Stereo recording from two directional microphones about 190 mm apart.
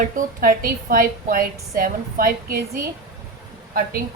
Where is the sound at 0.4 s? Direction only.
50° right (ahead or behind).